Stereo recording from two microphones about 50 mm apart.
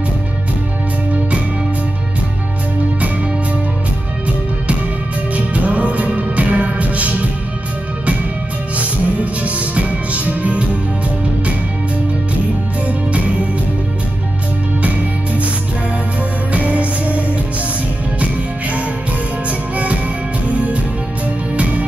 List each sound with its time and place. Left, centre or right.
5.3 s music: right
8.7 s music: right
12.8 s music: right
16.5 s music: right
19.7 s music: right